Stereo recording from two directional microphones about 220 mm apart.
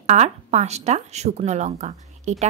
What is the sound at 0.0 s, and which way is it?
Speech, 30° right (ahead or behind).